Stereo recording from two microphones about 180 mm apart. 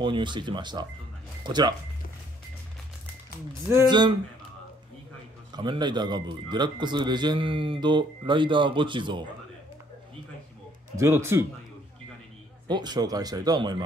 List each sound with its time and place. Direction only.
0.0 s a man's voice: 25° right (ahead or behind)
3.7 s a man's voice: 25° right (ahead or behind)
5.5 s a man's voice: 25° right (ahead or behind)
11.0 s speech: 15° right (ahead or behind)
12.6 s a man's voice: 25° right (ahead or behind)